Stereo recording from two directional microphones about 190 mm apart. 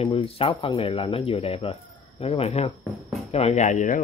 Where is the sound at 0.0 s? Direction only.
30° left (ahead or behind).